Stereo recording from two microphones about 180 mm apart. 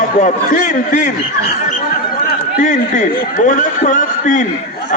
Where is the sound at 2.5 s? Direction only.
45° left (ahead or behind).